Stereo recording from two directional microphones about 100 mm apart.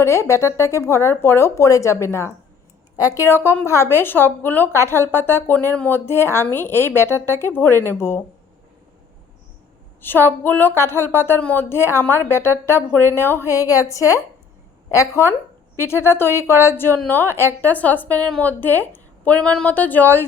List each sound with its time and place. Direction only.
0.0 s a woman's voice: 30° left (ahead or behind)
6.1 s speech: 25° left (ahead or behind)
10.0 s speech: 20° left (ahead or behind)
13.5 s a woman's voice: 35° left (ahead or behind)
15.8 s a woman's voice: 25° left (ahead or behind)